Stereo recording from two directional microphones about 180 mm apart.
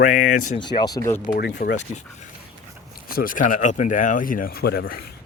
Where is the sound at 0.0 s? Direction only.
45° left (ahead or behind).